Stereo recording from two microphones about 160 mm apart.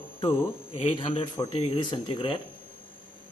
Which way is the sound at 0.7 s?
40° left (ahead or behind).